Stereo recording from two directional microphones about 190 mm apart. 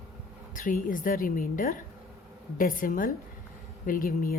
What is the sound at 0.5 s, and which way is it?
A woman's voice, 45° left (ahead or behind).